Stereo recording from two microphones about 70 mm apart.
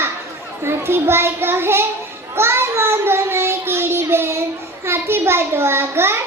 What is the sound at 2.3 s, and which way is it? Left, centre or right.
Child singing, right.